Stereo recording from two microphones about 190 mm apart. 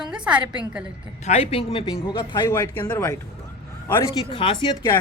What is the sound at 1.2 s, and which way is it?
Speech, 30° left (ahead or behind).